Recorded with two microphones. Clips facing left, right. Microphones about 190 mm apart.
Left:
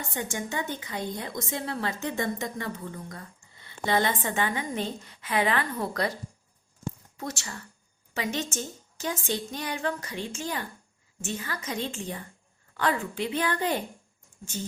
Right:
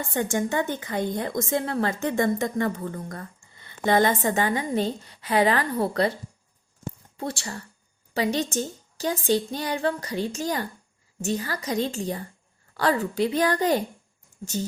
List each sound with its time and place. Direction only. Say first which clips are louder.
0.1 s a woman's voice: right 9 dB; 55° right (ahead or behind); by 6.1 s 30° right (ahead or behind)
7.2 s a woman's voice: right 9 dB; 30° right (ahead or behind)